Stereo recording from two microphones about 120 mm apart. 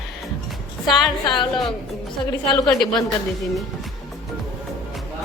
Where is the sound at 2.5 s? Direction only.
5° left (ahead or behind).